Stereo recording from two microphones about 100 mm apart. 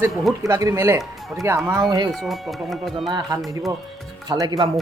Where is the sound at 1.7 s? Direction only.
45° right (ahead or behind).